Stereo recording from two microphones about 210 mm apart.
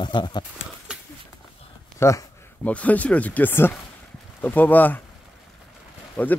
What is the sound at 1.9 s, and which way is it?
Speech, 15° left (ahead or behind).